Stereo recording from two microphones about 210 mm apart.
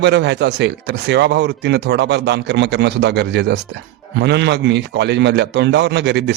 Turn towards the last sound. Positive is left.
turn(degrees=-55)  # may be behind; listen again after turning